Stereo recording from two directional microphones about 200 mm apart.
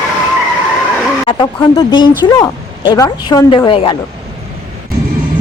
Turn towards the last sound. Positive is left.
turn(degrees=25)  # may be behind; listen again after turning